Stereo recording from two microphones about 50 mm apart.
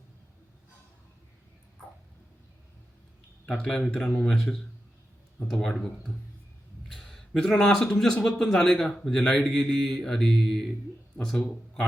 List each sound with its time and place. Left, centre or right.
3.6 s speech: centre
6.8 s a sound: centre
7.9 s speech: centre